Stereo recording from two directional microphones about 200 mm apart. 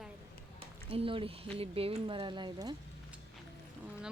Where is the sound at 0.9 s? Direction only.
25° right (ahead or behind).